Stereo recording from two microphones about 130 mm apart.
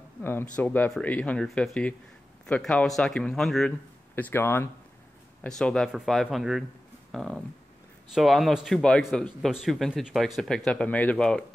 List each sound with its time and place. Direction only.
0.2 s speech: 15° left (ahead or behind)
4.1 s speech: 15° left (ahead or behind)